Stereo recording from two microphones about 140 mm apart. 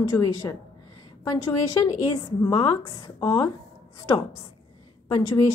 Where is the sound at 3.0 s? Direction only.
25° left (ahead or behind).